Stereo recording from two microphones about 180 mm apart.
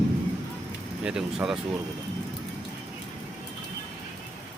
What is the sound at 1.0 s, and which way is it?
Speech, 5° right (ahead or behind).